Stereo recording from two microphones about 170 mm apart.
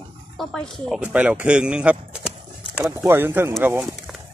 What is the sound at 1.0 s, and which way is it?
Speech, 10° right (ahead or behind).